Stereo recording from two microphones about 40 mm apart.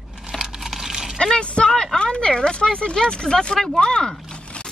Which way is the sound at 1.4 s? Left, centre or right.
Left.